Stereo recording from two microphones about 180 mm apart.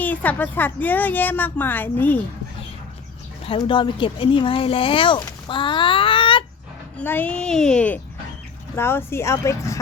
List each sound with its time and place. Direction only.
0.0 s a woman's voice: 10° left (ahead or behind)
3.4 s speech: 30° left (ahead or behind)
5.5 s a sound: 25° left (ahead or behind)
7.0 s a woman's voice: 10° left (ahead or behind)